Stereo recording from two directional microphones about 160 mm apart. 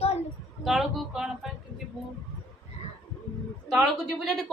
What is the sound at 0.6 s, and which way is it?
Speech, centre (ahead or behind).